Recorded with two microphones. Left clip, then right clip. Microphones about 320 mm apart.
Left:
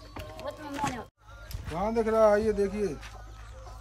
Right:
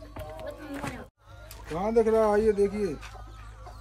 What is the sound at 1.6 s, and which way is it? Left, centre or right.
Speech, centre.